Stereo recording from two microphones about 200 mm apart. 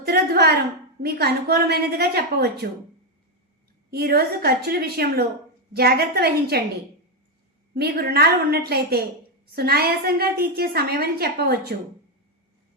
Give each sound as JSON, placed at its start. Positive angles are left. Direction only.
{"t": 0.0, "sound": "a sound", "side_deg": -50}
{"t": 1.0, "sound": "a woman's voice", "side_deg": -50}
{"t": 3.9, "sound": "a woman's voice", "side_deg": -50}
{"t": 7.7, "sound": "a woman's voice", "side_deg": -50}